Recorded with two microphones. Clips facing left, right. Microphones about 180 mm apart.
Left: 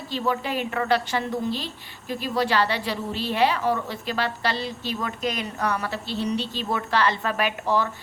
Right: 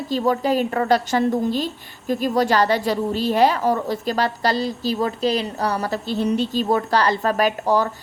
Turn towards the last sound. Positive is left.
turn(degrees=-40)  # may be behind; listen again after turning